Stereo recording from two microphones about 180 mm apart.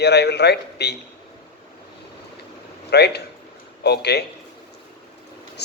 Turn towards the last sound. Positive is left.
turn(degrees=65)  # may be behind; listen again after turning